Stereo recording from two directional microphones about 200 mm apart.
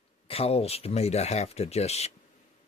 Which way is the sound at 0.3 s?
30° left (ahead or behind).